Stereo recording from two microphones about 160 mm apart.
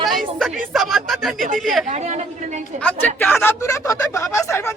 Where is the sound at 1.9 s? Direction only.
45° right (ahead or behind).